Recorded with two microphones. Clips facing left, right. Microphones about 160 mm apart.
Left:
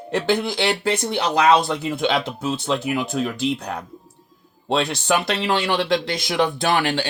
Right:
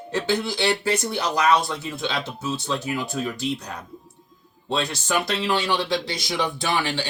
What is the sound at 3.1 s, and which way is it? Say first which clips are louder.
Speech: left 4 dB; 80° left.